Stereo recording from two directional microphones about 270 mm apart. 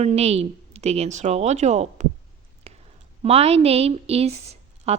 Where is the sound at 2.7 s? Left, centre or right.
Right.